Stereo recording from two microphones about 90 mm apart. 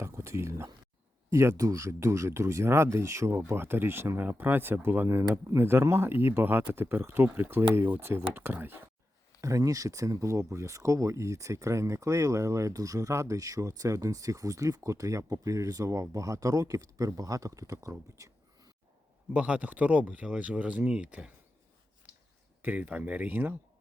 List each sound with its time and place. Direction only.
0.0 s a sound: 30° right (ahead or behind)
1.3 s speech: 30° right (ahead or behind)
9.4 s speech: 35° right (ahead or behind)
19.3 s speech: 10° right (ahead or behind)
22.6 s speech: 20° right (ahead or behind)